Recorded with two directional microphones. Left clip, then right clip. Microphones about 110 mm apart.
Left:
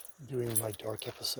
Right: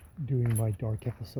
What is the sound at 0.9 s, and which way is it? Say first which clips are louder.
Speech: left 4 dB; 40° left (ahead or behind).